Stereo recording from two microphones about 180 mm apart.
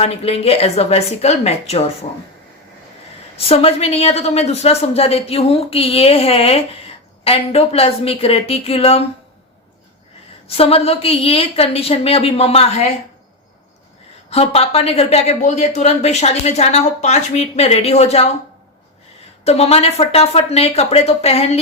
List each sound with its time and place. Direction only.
0.0 s speech: 35° left (ahead or behind)
3.3 s speech: 35° left (ahead or behind)
10.4 s speech: 35° left (ahead or behind)
14.3 s speech: 35° left (ahead or behind)
19.5 s speech: 35° left (ahead or behind)